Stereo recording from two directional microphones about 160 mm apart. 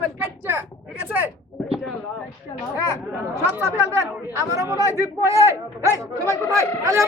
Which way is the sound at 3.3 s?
20° right (ahead or behind).